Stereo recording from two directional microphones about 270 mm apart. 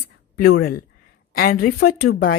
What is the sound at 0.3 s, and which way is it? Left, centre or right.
Speech, left.